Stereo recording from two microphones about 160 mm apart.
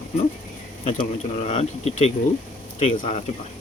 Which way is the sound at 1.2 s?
40° left (ahead or behind).